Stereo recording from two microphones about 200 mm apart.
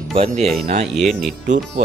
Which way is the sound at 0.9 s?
Centre (ahead or behind).